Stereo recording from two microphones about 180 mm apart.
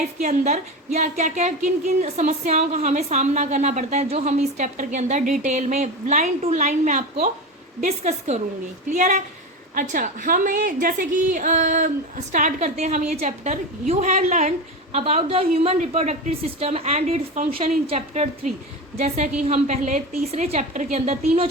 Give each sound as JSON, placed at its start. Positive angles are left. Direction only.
{"t": 0.0, "sound": "a woman's voice", "side_deg": -40}